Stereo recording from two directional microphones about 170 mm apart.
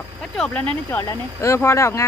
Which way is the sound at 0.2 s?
5° left (ahead or behind).